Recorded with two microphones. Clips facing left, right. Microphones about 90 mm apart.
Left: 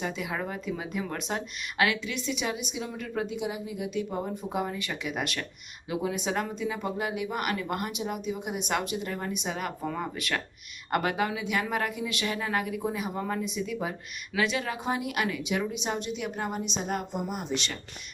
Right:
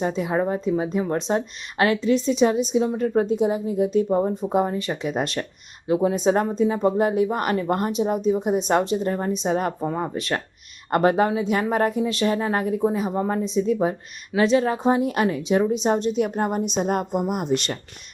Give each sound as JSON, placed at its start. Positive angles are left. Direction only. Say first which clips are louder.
{"t": 0.0, "sound": "a woman's voice", "louder": "right 10 dB", "side_deg": -35}